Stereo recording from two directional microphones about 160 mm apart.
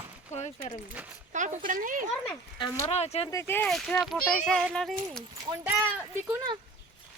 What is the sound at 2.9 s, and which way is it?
Speech, 40° left (ahead or behind).